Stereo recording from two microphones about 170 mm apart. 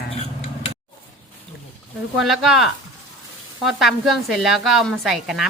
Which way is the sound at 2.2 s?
Centre (ahead or behind).